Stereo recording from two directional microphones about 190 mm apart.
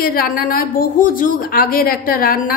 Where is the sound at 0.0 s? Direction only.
50° left (ahead or behind).